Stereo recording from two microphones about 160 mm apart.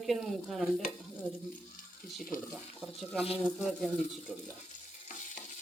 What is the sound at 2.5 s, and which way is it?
Stir, centre (ahead or behind).